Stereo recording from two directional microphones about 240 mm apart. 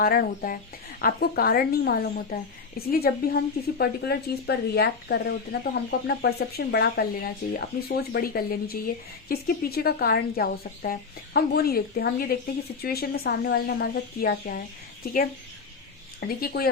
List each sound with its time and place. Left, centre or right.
0.0 s a woman's voice: left
16.4 s a woman's voice: left